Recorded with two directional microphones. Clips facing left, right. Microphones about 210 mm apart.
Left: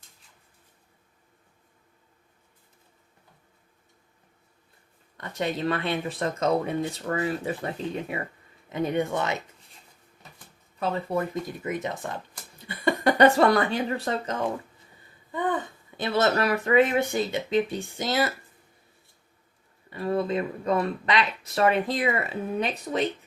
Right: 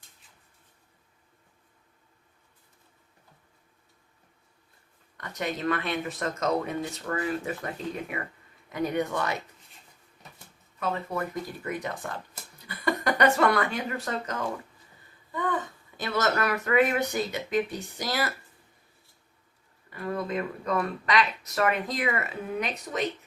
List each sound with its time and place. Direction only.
5.1 s speech: 25° left (ahead or behind)
10.8 s speech: 25° left (ahead or behind)
16.0 s speech: 30° left (ahead or behind)
19.9 s speech: 25° left (ahead or behind)